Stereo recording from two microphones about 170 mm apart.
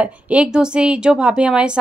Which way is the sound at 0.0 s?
5° right (ahead or behind).